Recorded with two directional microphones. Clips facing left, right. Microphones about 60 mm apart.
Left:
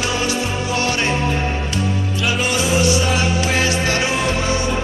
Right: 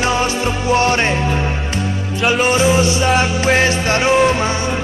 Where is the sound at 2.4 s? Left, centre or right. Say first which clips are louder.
Right 3 dB; right.